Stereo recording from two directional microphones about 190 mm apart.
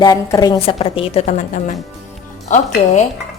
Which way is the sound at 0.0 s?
20° left (ahead or behind).